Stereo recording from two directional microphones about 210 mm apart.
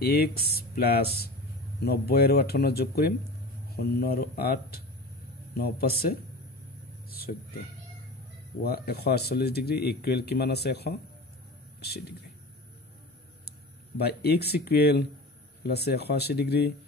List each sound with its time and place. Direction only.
0.0 s speech: 45° left (ahead or behind)
7.1 s a sound: 45° left (ahead or behind)
8.6 s speech: 50° left (ahead or behind)
13.5 s speech: 50° left (ahead or behind)